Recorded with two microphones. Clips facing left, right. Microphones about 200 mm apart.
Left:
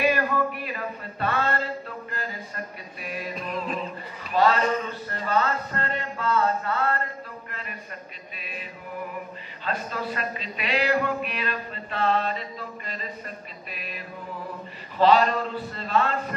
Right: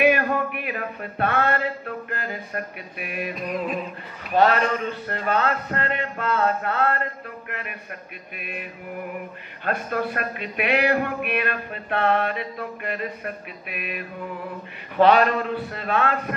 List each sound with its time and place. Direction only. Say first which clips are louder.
0.0 s music: right 3 dB; 60° right (ahead or behind)
8.4 s music: right 5 dB; 55° right (ahead or behind)
9.7 s music: right 5 dB; 55° right (ahead or behind)